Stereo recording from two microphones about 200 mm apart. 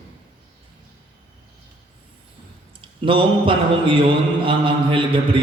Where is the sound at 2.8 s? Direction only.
25° right (ahead or behind).